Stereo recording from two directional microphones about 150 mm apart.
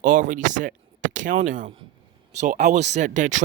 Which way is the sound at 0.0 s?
60° right (ahead or behind).